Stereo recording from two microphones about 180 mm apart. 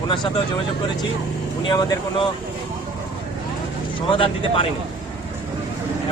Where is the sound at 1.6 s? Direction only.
25° left (ahead or behind).